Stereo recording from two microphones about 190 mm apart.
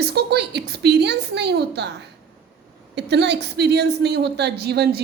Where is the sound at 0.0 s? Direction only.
60° right (ahead or behind).